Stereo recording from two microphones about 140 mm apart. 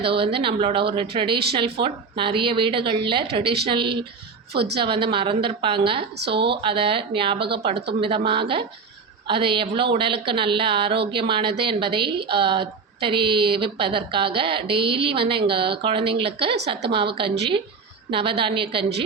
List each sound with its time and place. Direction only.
0.0 s a woman's voice: 40° right (ahead or behind)